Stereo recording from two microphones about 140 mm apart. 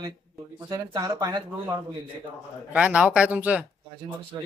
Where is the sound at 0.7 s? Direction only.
25° right (ahead or behind).